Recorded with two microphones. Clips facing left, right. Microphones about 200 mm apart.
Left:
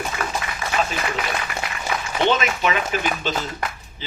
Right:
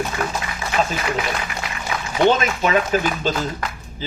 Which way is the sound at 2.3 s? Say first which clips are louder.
Right 3 dB; 45° right (ahead or behind).